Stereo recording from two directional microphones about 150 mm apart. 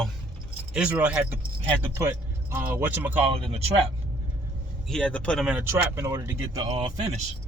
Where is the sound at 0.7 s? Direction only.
10° right (ahead or behind).